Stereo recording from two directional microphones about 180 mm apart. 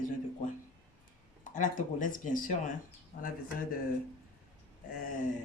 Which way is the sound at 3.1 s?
60° left (ahead or behind).